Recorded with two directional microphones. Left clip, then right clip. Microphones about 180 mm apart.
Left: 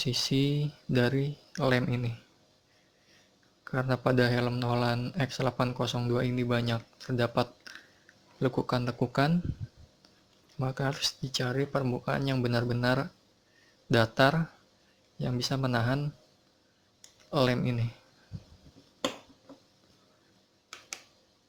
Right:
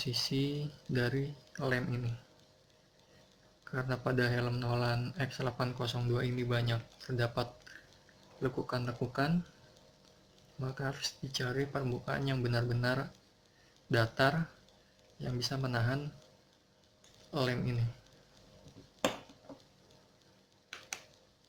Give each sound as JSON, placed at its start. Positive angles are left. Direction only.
{"t": 0.0, "sound": "a man's voice", "side_deg": 55}
{"t": 3.6, "sound": "a man's voice", "side_deg": 50}
{"t": 10.6, "sound": "a man's voice", "side_deg": 50}
{"t": 17.3, "sound": "speech", "side_deg": 55}